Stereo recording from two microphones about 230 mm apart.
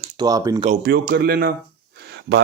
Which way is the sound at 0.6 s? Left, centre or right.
Right.